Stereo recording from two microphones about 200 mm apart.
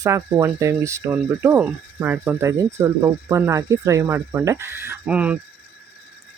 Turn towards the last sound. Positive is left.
turn(degrees=-5)  # may be behind; listen again after turning